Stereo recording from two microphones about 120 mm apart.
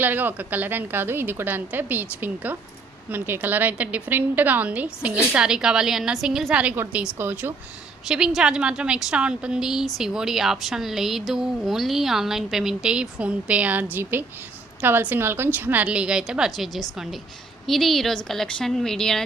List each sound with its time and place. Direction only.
0.0 s a woman's voice: 15° right (ahead or behind)
8.0 s a woman's voice: 5° right (ahead or behind)